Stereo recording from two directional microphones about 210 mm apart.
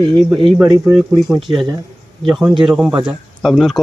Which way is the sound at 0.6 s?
15° right (ahead or behind).